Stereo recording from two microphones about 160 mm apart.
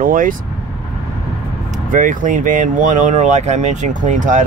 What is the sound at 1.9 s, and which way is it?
Speech, 55° right (ahead or behind).